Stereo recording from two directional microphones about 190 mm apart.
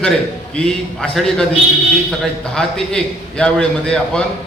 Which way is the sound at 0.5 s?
5° left (ahead or behind).